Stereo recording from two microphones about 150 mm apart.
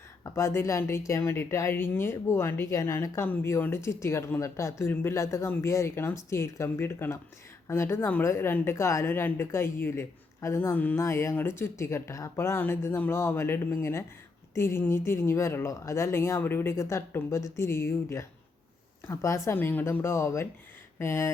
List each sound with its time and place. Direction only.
0.3 s speech: 20° left (ahead or behind)